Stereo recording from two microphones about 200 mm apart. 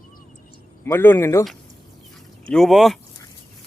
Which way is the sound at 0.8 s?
10° left (ahead or behind).